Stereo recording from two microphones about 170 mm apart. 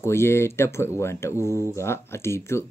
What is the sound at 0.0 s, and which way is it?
Speech, 15° left (ahead or behind).